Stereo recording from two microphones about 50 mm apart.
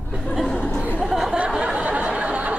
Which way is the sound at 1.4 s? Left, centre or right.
Centre.